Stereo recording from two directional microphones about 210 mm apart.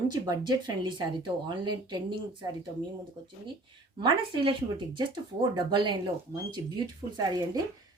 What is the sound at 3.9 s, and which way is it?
Speech, 20° right (ahead or behind).